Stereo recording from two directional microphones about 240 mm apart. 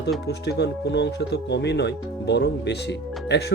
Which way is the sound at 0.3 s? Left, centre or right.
Left.